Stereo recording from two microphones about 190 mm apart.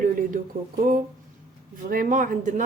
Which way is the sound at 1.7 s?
45° right (ahead or behind).